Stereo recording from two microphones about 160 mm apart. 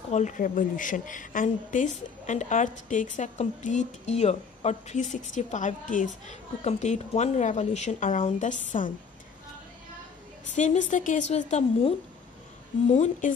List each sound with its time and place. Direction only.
0.1 s a woman's voice: 50° left (ahead or behind)
10.5 s a woman's voice: 50° left (ahead or behind)